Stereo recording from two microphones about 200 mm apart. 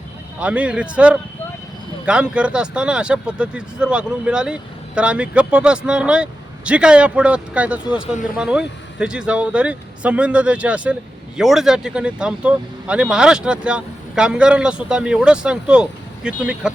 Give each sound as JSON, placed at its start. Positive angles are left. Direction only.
{"t": 0.3, "sound": "speech", "side_deg": -5}